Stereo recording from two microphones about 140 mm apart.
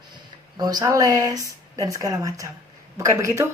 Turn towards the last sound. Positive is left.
turn(degrees=-20)  # may be behind; listen again after turning